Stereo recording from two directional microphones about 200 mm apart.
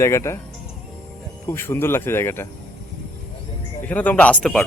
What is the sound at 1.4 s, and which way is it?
Speech, 10° left (ahead or behind).